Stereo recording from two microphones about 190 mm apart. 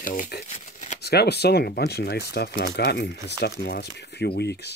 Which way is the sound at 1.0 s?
60° left (ahead or behind).